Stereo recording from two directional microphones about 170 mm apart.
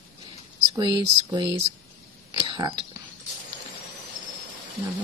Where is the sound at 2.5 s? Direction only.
25° right (ahead or behind).